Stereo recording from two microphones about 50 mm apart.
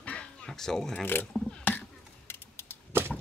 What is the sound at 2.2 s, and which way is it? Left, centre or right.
Typing, left.